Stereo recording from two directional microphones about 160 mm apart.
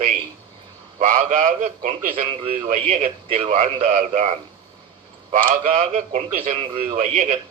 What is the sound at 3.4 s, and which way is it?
Speech, 50° right (ahead or behind).